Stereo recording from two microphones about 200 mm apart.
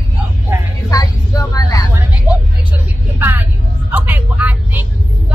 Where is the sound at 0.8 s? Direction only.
15° left (ahead or behind).